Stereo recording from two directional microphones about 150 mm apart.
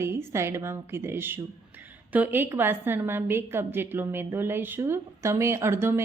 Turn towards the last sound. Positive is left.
turn(degrees=-15)  # may be behind; listen again after turning